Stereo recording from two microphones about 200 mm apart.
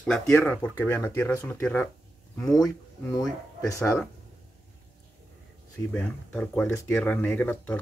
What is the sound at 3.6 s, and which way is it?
Speech, 15° left (ahead or behind).